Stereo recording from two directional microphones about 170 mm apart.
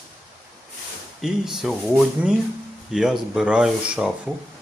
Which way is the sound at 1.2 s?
Centre (ahead or behind).